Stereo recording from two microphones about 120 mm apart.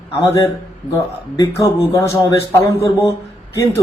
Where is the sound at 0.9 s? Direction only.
25° left (ahead or behind).